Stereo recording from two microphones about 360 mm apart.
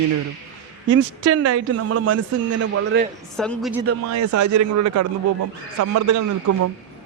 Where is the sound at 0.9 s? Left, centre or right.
Right.